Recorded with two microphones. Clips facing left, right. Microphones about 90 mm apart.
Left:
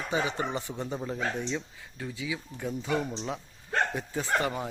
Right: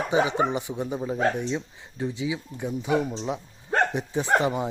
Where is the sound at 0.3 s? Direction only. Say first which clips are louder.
Right 7 dB; 15° right (ahead or behind).